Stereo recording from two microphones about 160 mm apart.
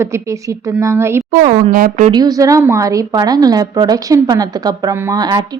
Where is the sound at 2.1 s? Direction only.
25° right (ahead or behind).